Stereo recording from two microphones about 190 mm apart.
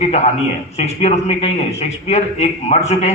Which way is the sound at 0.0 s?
35° left (ahead or behind).